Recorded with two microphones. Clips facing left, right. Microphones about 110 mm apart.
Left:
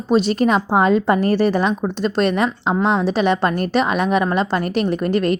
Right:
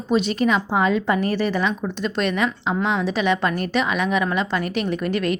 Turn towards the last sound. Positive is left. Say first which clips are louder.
# left 4 dB
turn(degrees=40)  # may be behind; listen again after turning